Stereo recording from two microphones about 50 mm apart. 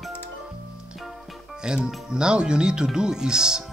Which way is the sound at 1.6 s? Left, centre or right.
Centre.